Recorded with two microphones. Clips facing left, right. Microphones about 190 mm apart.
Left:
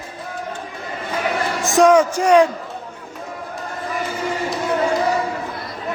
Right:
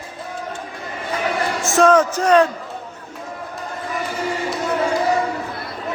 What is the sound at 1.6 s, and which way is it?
Speech, 15° left (ahead or behind).